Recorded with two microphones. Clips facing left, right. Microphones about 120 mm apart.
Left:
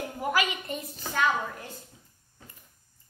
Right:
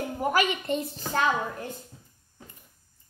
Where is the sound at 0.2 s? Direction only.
30° right (ahead or behind).